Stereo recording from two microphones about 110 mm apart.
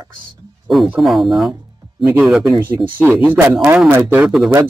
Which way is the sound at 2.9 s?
20° right (ahead or behind).